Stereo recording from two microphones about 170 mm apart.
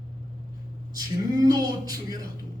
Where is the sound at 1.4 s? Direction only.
20° right (ahead or behind).